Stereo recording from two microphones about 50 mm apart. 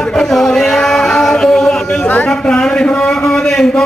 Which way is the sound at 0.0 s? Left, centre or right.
Centre.